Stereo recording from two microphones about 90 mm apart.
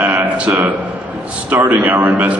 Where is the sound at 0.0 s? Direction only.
20° right (ahead or behind).